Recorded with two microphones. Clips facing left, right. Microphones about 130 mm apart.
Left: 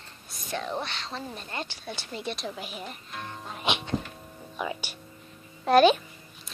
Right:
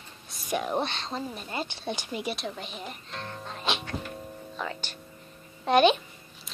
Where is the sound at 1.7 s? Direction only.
20° right (ahead or behind).